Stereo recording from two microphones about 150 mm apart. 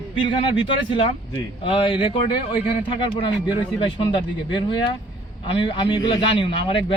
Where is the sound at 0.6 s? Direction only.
35° left (ahead or behind).